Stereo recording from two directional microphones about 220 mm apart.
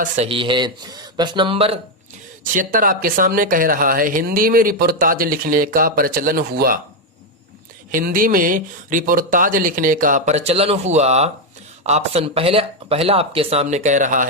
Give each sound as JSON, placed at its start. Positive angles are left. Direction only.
{"t": 0.0, "sound": "speech", "side_deg": -25}
{"t": 2.4, "sound": "speech", "side_deg": -35}
{"t": 7.9, "sound": "speech", "side_deg": -40}